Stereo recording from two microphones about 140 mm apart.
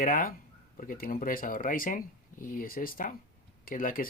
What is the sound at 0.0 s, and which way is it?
Speech, 85° left.